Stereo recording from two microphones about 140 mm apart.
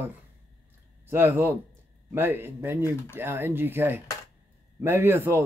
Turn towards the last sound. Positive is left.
turn(degrees=-15)  # may be behind; listen again after turning